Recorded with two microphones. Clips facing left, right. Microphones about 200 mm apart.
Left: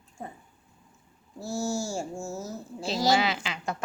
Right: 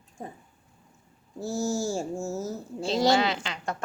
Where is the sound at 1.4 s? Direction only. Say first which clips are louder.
Right 2 dB; 15° right (ahead or behind).